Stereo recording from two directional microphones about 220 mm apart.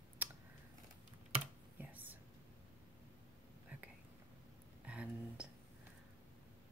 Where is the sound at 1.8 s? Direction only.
10° right (ahead or behind).